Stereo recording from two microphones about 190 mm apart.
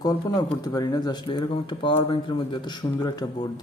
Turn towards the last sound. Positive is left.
turn(degrees=20)  # may be behind; listen again after turning